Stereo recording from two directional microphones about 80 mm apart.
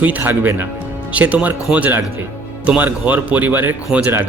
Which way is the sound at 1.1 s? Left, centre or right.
Centre.